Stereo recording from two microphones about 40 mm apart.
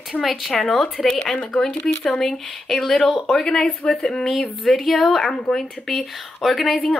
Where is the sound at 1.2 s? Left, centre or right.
Left; by 3.3 s centre.